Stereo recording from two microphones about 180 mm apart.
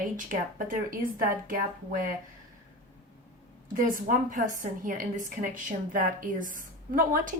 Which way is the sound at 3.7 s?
45° right (ahead or behind).